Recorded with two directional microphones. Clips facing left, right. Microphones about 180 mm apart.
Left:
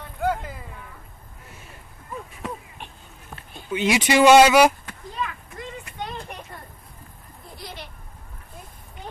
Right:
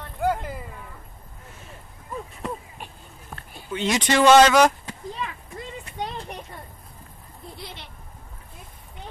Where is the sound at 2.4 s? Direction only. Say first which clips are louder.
Right 1 dB; centre (ahead or behind).